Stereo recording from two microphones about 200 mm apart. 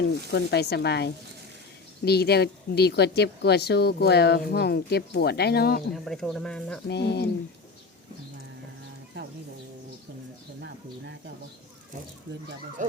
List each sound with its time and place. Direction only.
0.3 s speech: 55° left (ahead or behind)
5.9 s speech: centre (ahead or behind)
6.8 s speech: 55° left (ahead or behind)
10.6 s a sound: 60° right (ahead or behind)
12.8 s speech: 40° right (ahead or behind)